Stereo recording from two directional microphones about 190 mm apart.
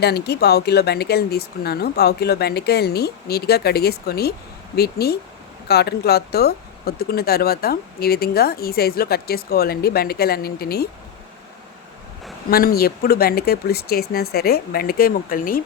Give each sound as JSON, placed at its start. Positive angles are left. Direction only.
{"t": 0.0, "sound": "speech", "side_deg": 60}
{"t": 12.5, "sound": "speech", "side_deg": 50}